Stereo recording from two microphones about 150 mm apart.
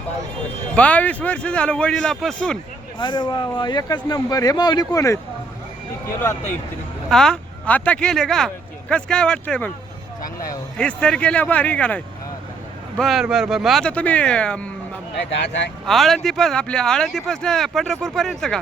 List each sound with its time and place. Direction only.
0.8 s a man's voice: 10° left (ahead or behind)
3.0 s speech: 30° left (ahead or behind)
7.1 s speech: 5° left (ahead or behind)
10.8 s a man's voice: 5° left (ahead or behind)
13.0 s speech: centre (ahead or behind)
15.9 s speech: centre (ahead or behind)